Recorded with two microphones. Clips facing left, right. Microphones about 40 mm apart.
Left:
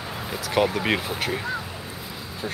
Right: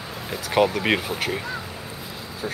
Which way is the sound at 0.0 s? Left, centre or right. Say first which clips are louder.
Left 2 dB; centre.